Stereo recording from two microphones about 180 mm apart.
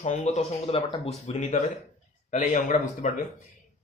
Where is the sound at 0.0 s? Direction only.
40° left (ahead or behind).